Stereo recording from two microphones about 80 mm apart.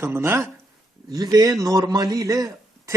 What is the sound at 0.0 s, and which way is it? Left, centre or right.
Speech, right.